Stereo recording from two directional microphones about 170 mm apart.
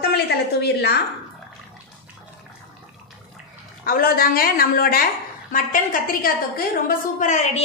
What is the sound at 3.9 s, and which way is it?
A woman's voice, 60° left (ahead or behind).